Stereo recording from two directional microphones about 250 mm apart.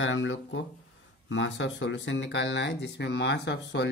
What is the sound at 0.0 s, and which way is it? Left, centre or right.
Speech, left.